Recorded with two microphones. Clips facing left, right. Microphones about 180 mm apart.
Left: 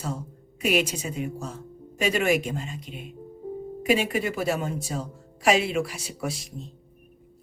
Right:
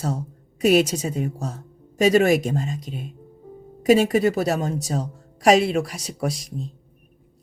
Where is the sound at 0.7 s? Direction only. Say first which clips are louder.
Right 7 dB; 40° right (ahead or behind).